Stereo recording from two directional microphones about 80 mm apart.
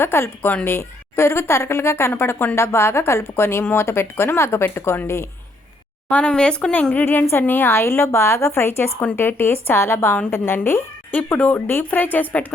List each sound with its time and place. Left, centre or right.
0.0 s speech: left
6.1 s speech: centre